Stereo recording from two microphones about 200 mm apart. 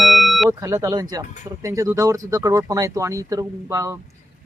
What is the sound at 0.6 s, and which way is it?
Speech, 15° right (ahead or behind).